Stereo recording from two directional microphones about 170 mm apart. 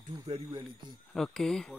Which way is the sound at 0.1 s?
30° right (ahead or behind).